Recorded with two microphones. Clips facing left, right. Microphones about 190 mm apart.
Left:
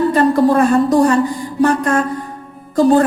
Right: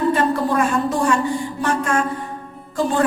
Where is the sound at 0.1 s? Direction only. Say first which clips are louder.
Left 6 dB; 40° left (ahead or behind).